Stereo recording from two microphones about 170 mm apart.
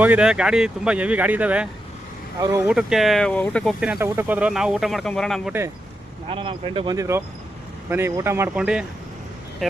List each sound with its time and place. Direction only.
0.0 s speech: 5° right (ahead or behind)
2.7 s speech: centre (ahead or behind)
3.9 s speech: 15° right (ahead or behind); by 5.5 s 5° left (ahead or behind)
6.2 s speech: 30° right (ahead or behind)
6.9 s speech: 20° right (ahead or behind)